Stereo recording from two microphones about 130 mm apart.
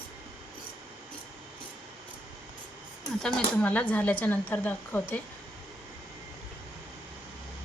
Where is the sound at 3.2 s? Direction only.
10° left (ahead or behind).